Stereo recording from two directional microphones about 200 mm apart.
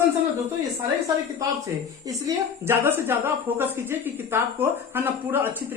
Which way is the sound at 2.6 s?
10° right (ahead or behind).